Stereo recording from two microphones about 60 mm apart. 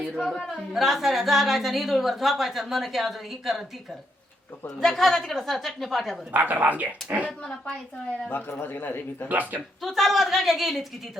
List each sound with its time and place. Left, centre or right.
0.0 s a sound: centre
0.4 s a woman's voice: centre
4.8 s a woman's voice: centre
6.3 s speech: right
8.3 s a man's voice: left
9.8 s a woman's voice: centre